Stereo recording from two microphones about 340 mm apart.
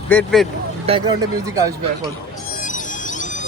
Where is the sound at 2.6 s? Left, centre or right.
Left.